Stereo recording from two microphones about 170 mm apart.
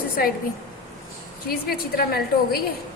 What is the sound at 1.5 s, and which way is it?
A woman's voice, 60° left (ahead or behind).